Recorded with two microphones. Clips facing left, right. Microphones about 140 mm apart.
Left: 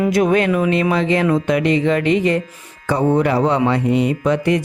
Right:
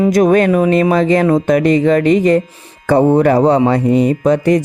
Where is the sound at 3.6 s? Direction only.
40° right (ahead or behind).